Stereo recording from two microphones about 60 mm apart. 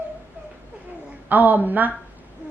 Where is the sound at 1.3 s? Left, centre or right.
Right.